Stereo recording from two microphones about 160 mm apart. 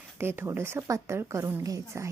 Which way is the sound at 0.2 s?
15° right (ahead or behind).